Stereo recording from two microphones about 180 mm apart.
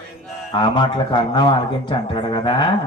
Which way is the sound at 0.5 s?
25° left (ahead or behind).